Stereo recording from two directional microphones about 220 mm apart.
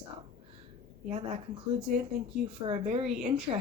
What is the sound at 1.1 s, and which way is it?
A woman's voice, 25° right (ahead or behind).